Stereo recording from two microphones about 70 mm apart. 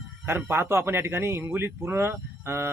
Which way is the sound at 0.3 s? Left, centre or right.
Right.